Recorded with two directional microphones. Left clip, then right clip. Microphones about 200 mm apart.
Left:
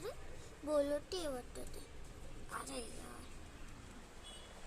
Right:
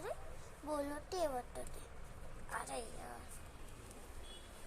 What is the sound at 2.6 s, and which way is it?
Speech, 10° left (ahead or behind).